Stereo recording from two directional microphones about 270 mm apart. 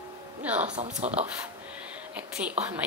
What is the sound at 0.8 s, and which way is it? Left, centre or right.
Speech, right.